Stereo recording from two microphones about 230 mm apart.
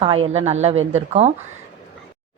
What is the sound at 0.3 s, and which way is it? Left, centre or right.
Speech, right.